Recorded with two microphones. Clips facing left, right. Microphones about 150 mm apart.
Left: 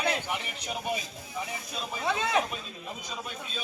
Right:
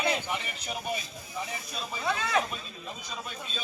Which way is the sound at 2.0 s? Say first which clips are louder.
Left 1 dB; 20° left (ahead or behind).